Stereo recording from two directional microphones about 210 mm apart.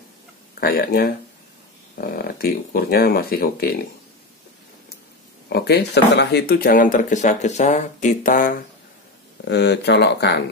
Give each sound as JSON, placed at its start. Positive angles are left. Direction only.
{"t": 0.6, "sound": "speech", "side_deg": 45}
{"t": 5.5, "sound": "speech", "side_deg": 50}
{"t": 9.4, "sound": "speech", "side_deg": 55}